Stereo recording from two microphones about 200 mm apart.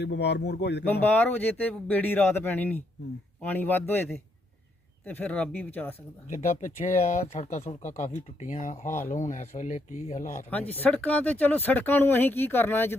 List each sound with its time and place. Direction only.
0.0 s a man's voice: 55° left (ahead or behind)
0.9 s speech: 10° left (ahead or behind)
6.3 s speech: 40° left (ahead or behind)
10.8 s speech: 5° left (ahead or behind)